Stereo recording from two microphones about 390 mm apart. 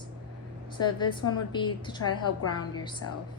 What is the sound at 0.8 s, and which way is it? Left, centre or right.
A woman's voice, centre.